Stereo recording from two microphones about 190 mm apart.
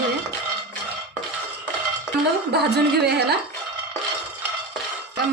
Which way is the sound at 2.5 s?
60° right (ahead or behind).